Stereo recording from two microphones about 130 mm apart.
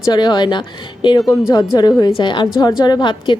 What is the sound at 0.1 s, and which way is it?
A woman's voice, 30° left (ahead or behind).